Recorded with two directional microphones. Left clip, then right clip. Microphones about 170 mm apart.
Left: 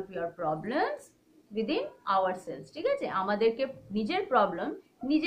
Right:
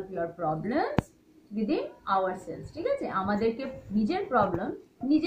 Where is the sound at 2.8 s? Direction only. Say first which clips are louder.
Even; 40° left (ahead or behind).